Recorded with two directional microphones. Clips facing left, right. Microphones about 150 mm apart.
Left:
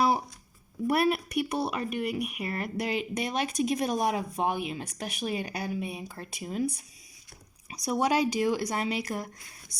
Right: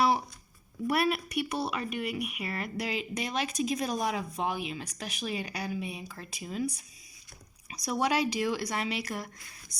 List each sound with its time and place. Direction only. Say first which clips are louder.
0.9 s speech: left 3 dB; 45° left (ahead or behind)
8.1 s speech: left 3 dB; 40° left (ahead or behind)